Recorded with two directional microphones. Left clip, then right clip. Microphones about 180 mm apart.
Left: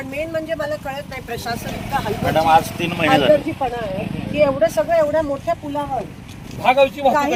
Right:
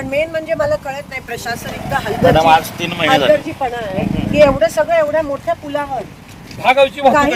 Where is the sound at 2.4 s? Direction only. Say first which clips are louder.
Right 3 dB; 80° right.